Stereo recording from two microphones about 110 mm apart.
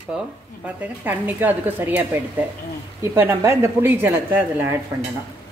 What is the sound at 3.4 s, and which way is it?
A woman's voice, 25° right (ahead or behind).